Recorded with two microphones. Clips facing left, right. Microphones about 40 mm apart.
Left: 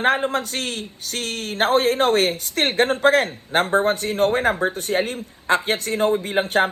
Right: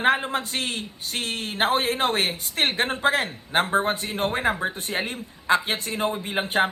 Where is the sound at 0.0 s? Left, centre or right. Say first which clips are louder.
Left 2 dB; right.